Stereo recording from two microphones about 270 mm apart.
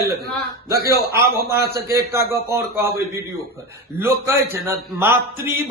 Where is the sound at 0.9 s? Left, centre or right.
Right.